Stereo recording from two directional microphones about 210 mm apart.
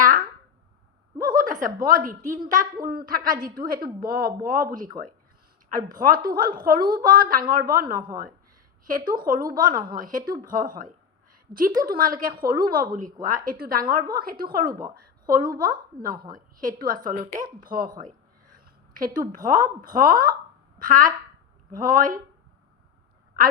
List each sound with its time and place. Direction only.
0.0 s a sound: 40° right (ahead or behind)
1.2 s a woman's voice: 45° right (ahead or behind)
9.2 s a woman's voice: 40° right (ahead or behind)